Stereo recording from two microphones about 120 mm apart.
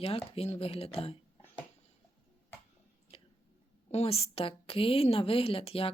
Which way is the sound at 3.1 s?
55° left (ahead or behind).